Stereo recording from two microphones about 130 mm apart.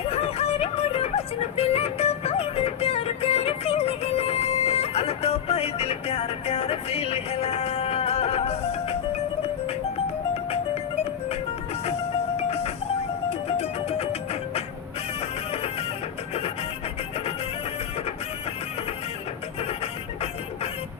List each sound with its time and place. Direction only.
0.1 s music: 55° left (ahead or behind)
13.6 s music: 50° left (ahead or behind)
19.5 s music: 50° left (ahead or behind)